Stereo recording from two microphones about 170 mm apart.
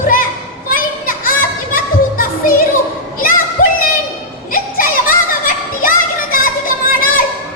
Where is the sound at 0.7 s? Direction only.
55° left (ahead or behind).